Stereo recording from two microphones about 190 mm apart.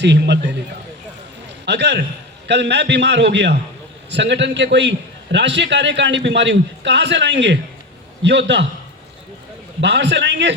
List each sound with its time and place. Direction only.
0.0 s a man's voice: 65° right (ahead or behind)
1.6 s a man's voice: 65° right (ahead or behind)
9.8 s a man's voice: 65° right (ahead or behind)